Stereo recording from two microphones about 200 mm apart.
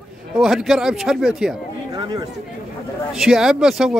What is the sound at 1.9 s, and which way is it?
Speech, 20° right (ahead or behind).